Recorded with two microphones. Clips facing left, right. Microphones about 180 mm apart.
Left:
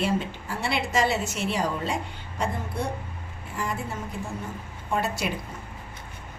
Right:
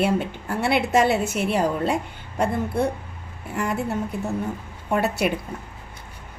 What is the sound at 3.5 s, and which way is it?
A woman's voice, 65° right (ahead or behind).